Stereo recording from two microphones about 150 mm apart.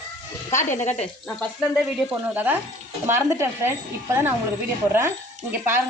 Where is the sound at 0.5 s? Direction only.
55° left (ahead or behind).